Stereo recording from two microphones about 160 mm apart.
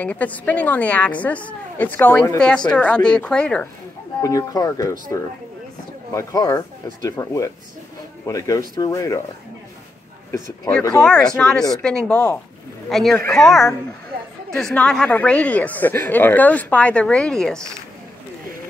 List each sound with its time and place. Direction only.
0.0 s a woman's voice: 10° left (ahead or behind)
4.2 s speech: 20° left (ahead or behind)
6.1 s speech: 20° left (ahead or behind)
11.0 s a woman's voice: 5° left (ahead or behind)